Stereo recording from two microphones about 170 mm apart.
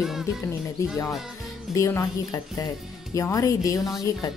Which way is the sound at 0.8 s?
20° left (ahead or behind).